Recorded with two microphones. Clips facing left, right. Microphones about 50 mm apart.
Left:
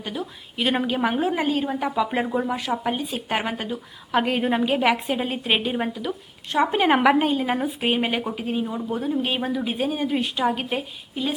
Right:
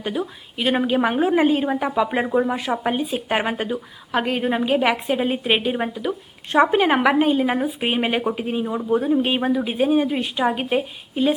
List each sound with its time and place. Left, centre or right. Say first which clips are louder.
0.0 s speech: right 5 dB; centre
0.6 s a woman's voice: right 3 dB; centre
4.1 s a woman's voice: even; centre